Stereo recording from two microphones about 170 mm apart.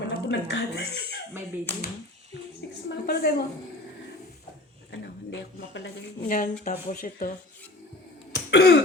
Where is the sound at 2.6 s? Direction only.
90° left.